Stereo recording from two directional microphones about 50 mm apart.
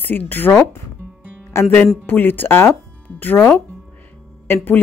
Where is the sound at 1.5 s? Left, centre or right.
Left.